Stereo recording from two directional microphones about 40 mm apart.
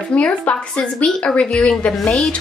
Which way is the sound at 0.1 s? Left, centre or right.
Left.